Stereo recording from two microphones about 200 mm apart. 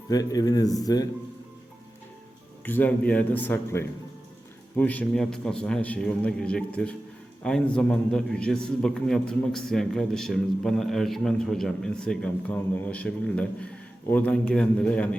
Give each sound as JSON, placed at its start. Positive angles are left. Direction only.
{"t": 0.1, "sound": "speech", "side_deg": 20}
{"t": 2.6, "sound": "a man's voice", "side_deg": 10}